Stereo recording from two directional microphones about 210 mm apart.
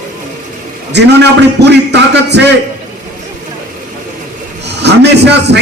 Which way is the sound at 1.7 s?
55° right (ahead or behind).